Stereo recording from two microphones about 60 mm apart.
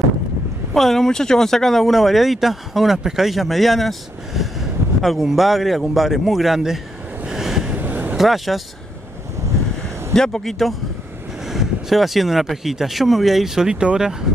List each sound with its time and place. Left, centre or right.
0.7 s speech: centre
7.2 s vehicle: centre
7.7 s vehicle: right
8.2 s speech: centre
9.4 s waves: right
10.1 s speech: centre